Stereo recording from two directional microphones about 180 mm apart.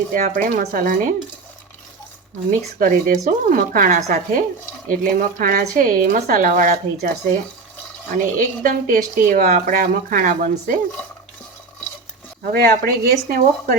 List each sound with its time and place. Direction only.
0.1 s speech: 45° right (ahead or behind)
2.7 s speech: 50° right (ahead or behind)
8.2 s speech: 50° right (ahead or behind)
12.4 s speech: 55° right (ahead or behind)